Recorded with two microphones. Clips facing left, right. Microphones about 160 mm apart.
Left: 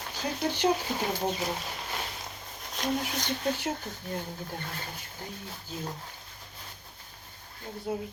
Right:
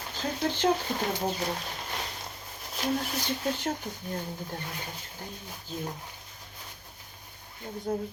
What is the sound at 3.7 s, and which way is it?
Speech, 15° right (ahead or behind).